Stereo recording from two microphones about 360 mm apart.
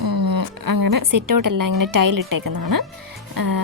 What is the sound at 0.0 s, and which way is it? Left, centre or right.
A woman's voice, right.